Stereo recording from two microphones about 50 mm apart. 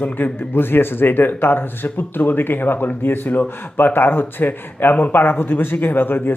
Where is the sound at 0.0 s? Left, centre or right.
Left.